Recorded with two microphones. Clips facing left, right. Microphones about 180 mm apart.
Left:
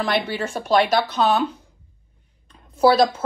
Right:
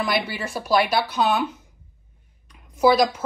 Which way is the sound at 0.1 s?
10° right (ahead or behind).